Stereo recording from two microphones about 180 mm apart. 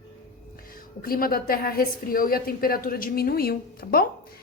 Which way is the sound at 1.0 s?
55° left (ahead or behind).